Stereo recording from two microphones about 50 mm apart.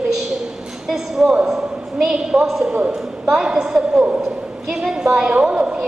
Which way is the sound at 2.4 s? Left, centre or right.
Centre.